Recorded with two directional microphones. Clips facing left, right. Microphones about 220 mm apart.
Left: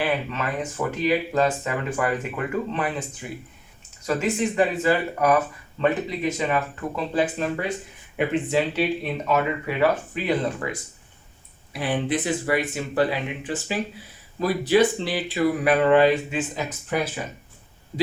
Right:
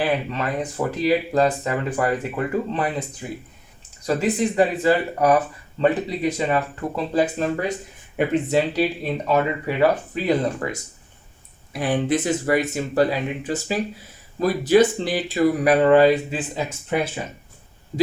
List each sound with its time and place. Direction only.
0.0 s speech: 35° right (ahead or behind)